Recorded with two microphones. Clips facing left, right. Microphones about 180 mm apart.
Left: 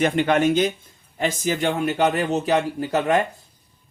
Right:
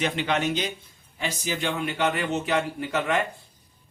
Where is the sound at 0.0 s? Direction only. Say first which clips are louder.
Left 7 dB; 50° left (ahead or behind).